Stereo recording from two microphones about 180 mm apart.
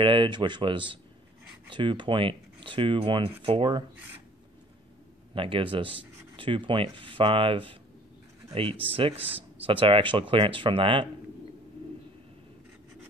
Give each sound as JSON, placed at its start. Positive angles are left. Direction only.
{"t": 0.0, "sound": "speech", "side_deg": -25}
{"t": 5.3, "sound": "speech", "side_deg": -30}
{"t": 8.9, "sound": "speech", "side_deg": -30}